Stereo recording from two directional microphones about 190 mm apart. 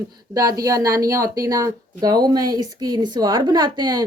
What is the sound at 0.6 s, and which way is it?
Speech, 20° right (ahead or behind).